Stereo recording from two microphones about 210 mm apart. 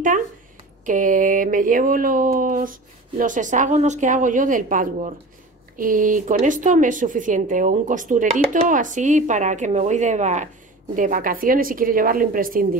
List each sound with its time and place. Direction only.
0.8 s speech: 40° right (ahead or behind)